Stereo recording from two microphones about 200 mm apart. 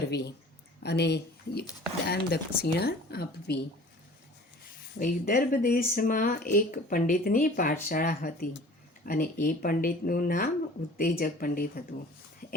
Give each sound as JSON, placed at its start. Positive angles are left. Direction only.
{"t": 0.1, "sound": "speech", "side_deg": 55}
{"t": 4.9, "sound": "speech", "side_deg": 45}
{"t": 12.4, "sound": "a sound", "side_deg": 45}